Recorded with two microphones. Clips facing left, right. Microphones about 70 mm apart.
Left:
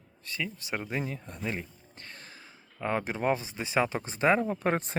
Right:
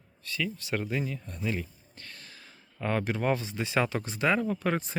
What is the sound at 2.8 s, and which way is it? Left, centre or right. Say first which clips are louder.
Speech: even; centre.